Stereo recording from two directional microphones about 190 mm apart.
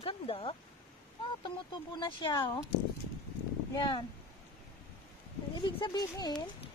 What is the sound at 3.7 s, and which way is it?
Speech, 20° left (ahead or behind).